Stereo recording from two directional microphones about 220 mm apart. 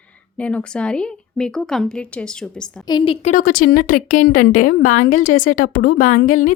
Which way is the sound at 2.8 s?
20° left (ahead or behind).